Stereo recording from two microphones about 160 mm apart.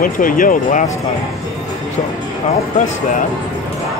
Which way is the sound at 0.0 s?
60° left (ahead or behind).